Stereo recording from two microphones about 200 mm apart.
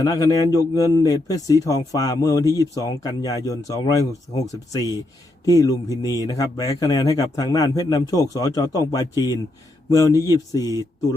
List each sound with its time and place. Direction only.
0.0 s a man's voice: 20° left (ahead or behind)